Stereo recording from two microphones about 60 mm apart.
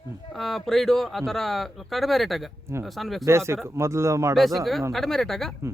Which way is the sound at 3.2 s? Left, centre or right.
Right.